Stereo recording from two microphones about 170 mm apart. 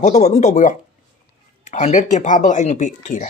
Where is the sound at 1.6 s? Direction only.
45° left (ahead or behind).